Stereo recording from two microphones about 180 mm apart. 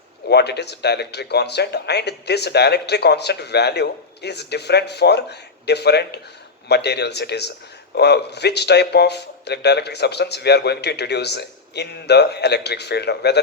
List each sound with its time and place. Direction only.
0.3 s speech: 65° left (ahead or behind)